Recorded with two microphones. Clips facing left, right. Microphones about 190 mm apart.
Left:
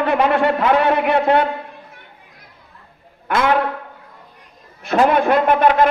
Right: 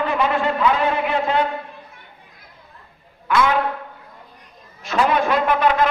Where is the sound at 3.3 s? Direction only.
50° left (ahead or behind).